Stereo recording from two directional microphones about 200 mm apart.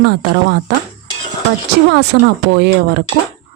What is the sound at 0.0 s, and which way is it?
Speech, 55° right (ahead or behind).